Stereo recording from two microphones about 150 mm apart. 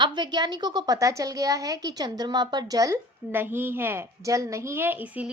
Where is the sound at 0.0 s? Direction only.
30° right (ahead or behind).